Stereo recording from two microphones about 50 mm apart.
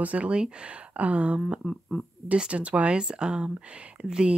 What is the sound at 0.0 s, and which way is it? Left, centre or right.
Speech, right.